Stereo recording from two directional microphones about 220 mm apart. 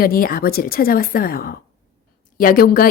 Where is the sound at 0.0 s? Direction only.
40° left (ahead or behind).